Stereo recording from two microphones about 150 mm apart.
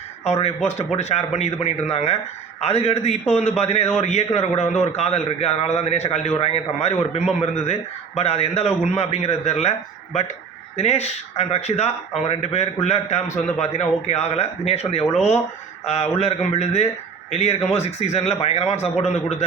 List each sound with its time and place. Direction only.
0.3 s a man's voice: 45° left (ahead or behind)
10.8 s a man's voice: 45° left (ahead or behind)